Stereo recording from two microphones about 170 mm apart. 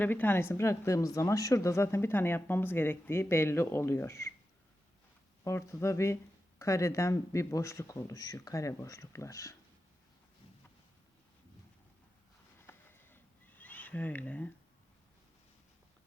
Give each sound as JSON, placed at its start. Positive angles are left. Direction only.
{"t": 0.0, "sound": "a woman's voice", "side_deg": 10}
{"t": 5.4, "sound": "a woman's voice", "side_deg": 15}
{"t": 12.5, "sound": "a sound", "side_deg": 15}